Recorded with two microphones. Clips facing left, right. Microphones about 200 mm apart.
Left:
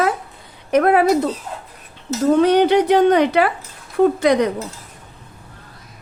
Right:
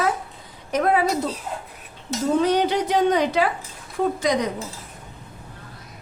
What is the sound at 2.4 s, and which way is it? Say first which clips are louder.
A woman's voice: left 7 dB; 65° left (ahead or behind).